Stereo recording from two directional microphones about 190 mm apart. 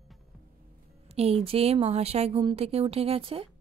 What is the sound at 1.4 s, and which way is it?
Speech, 30° right (ahead or behind).